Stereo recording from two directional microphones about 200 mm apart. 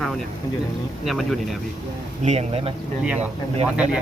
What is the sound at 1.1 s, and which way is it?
Speech, centre (ahead or behind).